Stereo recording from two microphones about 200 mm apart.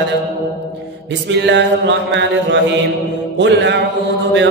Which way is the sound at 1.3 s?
60° right (ahead or behind).